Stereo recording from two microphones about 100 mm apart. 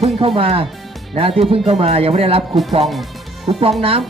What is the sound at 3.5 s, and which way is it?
Speech, 65° right (ahead or behind).